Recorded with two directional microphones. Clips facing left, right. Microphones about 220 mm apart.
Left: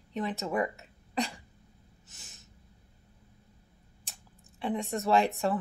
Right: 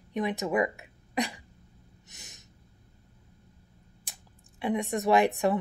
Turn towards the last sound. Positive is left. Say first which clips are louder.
# right 3 dB
turn(degrees=-15)  # may be behind; listen again after turning